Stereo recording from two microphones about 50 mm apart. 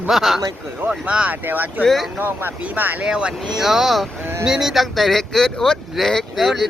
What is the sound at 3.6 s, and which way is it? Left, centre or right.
Speech, centre.